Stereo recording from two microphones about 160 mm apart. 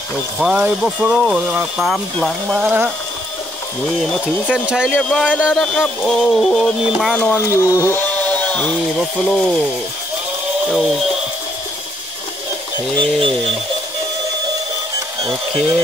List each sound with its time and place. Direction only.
0.4 s speech: 5° right (ahead or behind)
4.0 s speech: 5° left (ahead or behind)
4.6 s speech: 5° right (ahead or behind)
4.9 s speech: 5° left (ahead or behind)
5.2 s speech: 5° right (ahead or behind)
5.6 s speech: 5° left (ahead or behind)
10.7 s speech: centre (ahead or behind)
12.9 s a sound: 35° right (ahead or behind)